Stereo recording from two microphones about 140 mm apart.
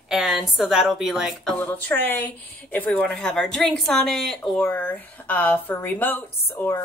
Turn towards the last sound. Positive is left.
turn(degrees=15)  # may be behind; listen again after turning